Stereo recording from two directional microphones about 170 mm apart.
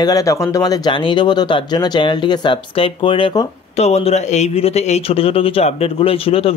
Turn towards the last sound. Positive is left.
turn(degrees=35)  # may be behind; listen again after turning